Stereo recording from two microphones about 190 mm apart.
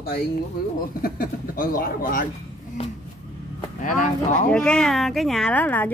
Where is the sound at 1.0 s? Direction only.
50° left (ahead or behind).